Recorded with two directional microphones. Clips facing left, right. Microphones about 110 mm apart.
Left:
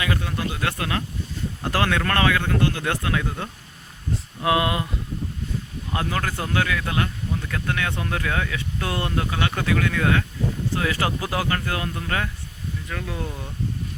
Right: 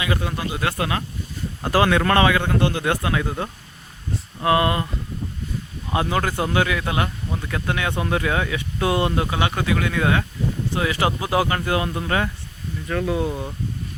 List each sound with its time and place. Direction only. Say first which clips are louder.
0.0 s speech: right 1 dB; 10° right (ahead or behind)
4.4 s speech: right 2 dB; 5° left (ahead or behind)
5.9 s speech: right 4 dB; 15° right (ahead or behind)